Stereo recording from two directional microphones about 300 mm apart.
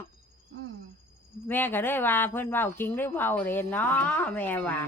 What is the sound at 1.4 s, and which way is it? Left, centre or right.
Speech, centre.